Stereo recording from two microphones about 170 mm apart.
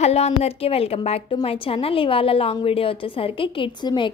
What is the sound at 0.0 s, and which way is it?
A woman's voice, 40° left (ahead or behind).